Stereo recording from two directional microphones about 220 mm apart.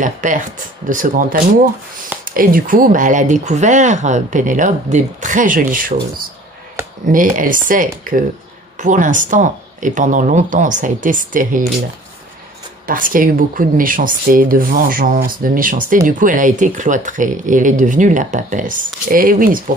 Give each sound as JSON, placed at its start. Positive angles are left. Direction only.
{"t": 0.0, "sound": "speech", "side_deg": -35}
{"t": 7.1, "sound": "speech", "side_deg": -40}
{"t": 12.8, "sound": "speech", "side_deg": -40}